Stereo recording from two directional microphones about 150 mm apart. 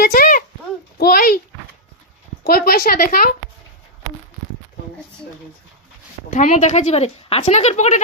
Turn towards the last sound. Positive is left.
turn(degrees=50)  # may be behind; listen again after turning